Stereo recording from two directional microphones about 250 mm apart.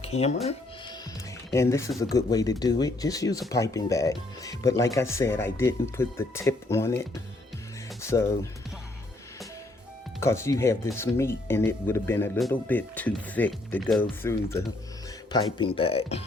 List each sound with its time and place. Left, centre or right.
0.0 s speech: left
1.5 s speech: centre
10.2 s speech: centre